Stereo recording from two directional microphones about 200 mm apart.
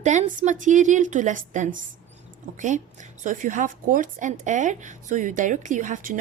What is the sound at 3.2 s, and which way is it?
A woman's voice, 40° right (ahead or behind).